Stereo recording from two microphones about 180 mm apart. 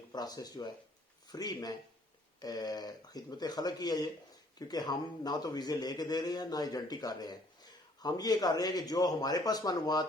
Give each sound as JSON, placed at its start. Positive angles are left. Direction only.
{"t": 0.1, "sound": "a man's voice", "side_deg": 20}